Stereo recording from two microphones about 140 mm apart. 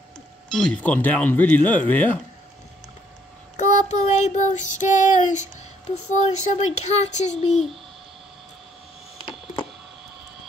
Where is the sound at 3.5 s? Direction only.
55° left (ahead or behind).